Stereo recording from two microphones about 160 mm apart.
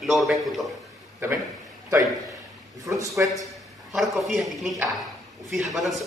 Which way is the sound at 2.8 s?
20° right (ahead or behind).